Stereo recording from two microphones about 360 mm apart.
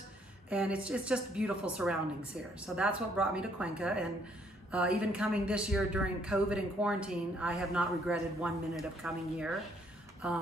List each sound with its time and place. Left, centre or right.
0.5 s speech: centre